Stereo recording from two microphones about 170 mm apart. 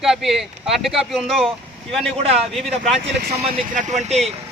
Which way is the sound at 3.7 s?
50° right (ahead or behind).